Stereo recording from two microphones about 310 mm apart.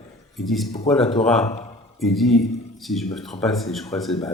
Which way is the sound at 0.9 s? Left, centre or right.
Centre.